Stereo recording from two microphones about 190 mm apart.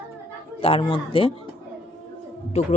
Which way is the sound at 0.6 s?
30° left (ahead or behind).